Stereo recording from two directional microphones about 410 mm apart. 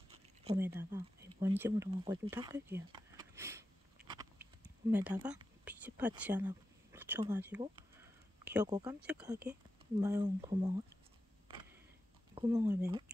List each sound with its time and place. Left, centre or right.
0.1 s speech: centre
4.9 s speech: centre
12.4 s speech: centre